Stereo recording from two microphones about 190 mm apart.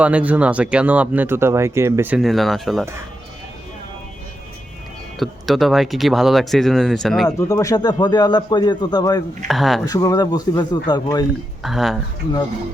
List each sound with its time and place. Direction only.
0.0 s speech: 5° right (ahead or behind)
5.2 s speech: centre (ahead or behind)
7.3 s a man's voice: 15° left (ahead or behind)
9.5 s speech: centre (ahead or behind)
9.8 s a man's voice: 20° left (ahead or behind)
11.6 s speech: centre (ahead or behind)